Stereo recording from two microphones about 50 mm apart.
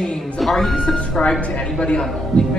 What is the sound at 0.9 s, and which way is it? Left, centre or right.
A woman's voice, centre.